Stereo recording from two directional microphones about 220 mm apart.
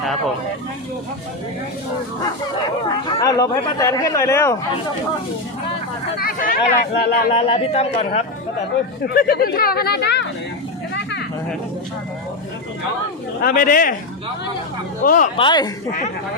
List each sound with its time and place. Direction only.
3.1 s speech: 15° left (ahead or behind)
6.1 s speech: 40° left (ahead or behind)
7.3 s a man's voice: 25° left (ahead or behind)
9.1 s speech: 40° left (ahead or behind)
13.4 s speech: 40° left (ahead or behind)
15.0 s speech: 35° left (ahead or behind)
15.4 s a man's voice: 20° left (ahead or behind)